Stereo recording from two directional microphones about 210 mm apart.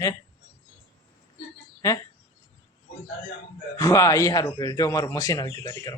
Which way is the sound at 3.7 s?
15° left (ahead or behind).